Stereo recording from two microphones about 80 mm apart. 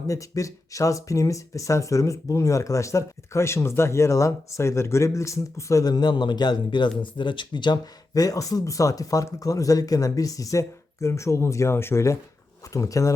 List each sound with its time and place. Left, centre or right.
0.1 s speech: left
8.1 s speech: left